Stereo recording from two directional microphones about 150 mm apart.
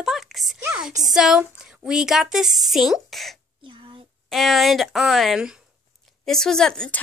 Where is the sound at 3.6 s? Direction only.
35° right (ahead or behind).